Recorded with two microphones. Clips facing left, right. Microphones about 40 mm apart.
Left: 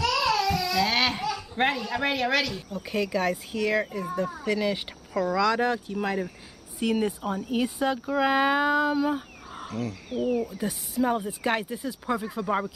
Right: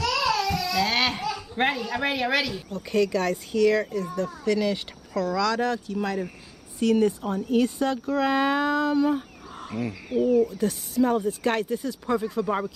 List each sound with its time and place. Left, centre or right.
0.0 s a sound: centre
2.7 s speech: centre
9.7 s speech: right
10.4 s speech: centre